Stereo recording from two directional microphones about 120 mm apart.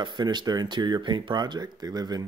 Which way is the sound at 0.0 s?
40° right (ahead or behind).